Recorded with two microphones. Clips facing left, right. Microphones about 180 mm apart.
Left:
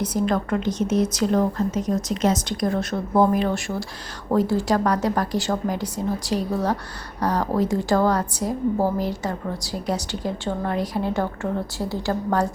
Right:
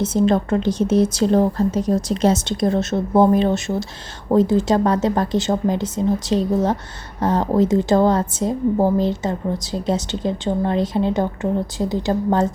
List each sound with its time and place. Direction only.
0.0 s a woman's voice: 25° right (ahead or behind)